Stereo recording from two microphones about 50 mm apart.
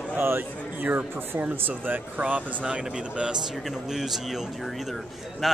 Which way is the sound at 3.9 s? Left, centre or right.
Centre.